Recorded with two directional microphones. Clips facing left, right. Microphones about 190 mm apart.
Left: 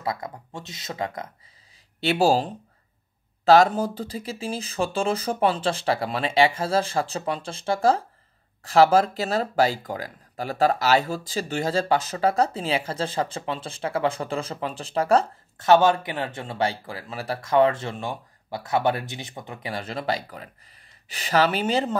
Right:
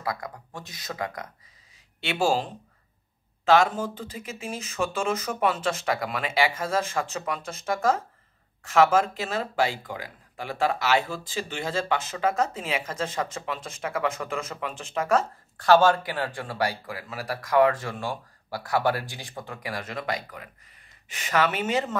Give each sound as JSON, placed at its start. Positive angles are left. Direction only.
{"t": 0.0, "sound": "speech", "side_deg": 25}
{"t": 2.0, "sound": "speech", "side_deg": 35}
{"t": 15.6, "sound": "speech", "side_deg": 20}